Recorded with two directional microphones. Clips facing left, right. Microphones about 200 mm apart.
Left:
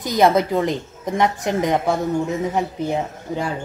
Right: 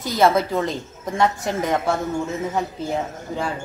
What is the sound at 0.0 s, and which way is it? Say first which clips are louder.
A woman's voice: left 2 dB; 20° left (ahead or behind).